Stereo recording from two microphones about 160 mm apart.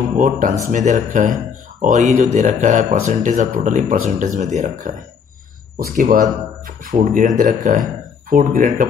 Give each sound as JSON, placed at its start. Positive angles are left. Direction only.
{"t": 0.2, "sound": "speech", "side_deg": -50}